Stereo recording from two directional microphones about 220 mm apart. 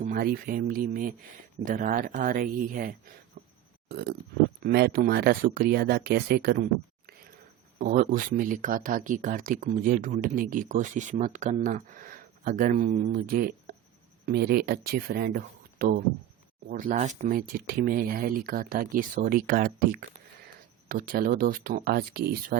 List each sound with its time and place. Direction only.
0.0 s speech: 40° right (ahead or behind)
3.4 s a sound: 50° right (ahead or behind)
3.8 s speech: 45° right (ahead or behind)
7.8 s speech: 40° right (ahead or behind)